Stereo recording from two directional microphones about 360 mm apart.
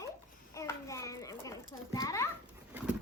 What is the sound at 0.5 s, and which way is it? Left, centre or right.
Children playing, centre.